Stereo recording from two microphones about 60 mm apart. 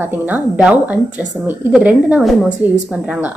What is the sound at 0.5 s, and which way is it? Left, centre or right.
A woman's voice, right.